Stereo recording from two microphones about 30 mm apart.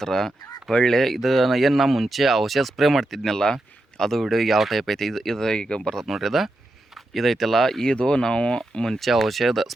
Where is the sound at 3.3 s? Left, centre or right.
Left.